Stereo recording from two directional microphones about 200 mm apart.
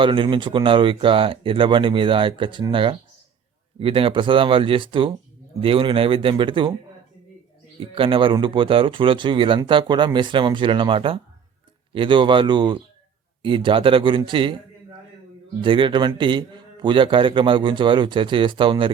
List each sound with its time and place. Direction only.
0.0 s speech: 25° right (ahead or behind)
7.8 s speech: 25° right (ahead or behind)
15.6 s speech: 25° right (ahead or behind)